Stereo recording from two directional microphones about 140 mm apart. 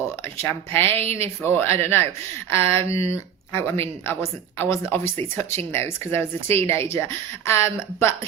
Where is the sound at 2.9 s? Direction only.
45° right (ahead or behind).